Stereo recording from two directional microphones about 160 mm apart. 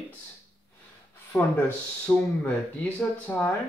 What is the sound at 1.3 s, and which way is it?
Speech, 15° left (ahead or behind).